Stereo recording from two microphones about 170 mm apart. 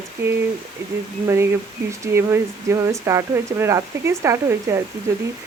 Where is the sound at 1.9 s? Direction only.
15° right (ahead or behind).